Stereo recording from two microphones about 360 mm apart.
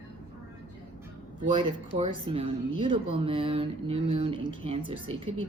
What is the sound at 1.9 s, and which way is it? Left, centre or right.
Speech, centre.